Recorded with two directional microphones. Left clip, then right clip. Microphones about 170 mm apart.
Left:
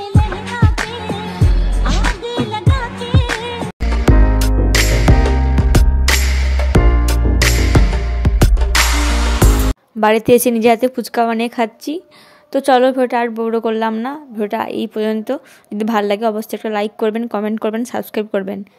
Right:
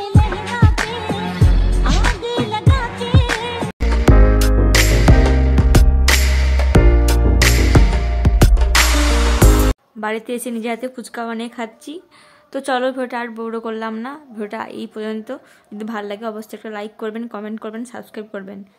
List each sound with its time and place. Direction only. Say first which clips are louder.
0.0 s music: even; centre (ahead or behind)
9.9 s a woman's voice: left 18 dB; 45° left (ahead or behind)